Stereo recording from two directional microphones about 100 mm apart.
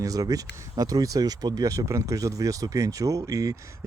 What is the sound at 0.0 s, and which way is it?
Speech, 35° right (ahead or behind).